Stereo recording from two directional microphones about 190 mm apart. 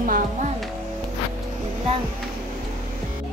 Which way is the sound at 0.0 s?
45° right (ahead or behind).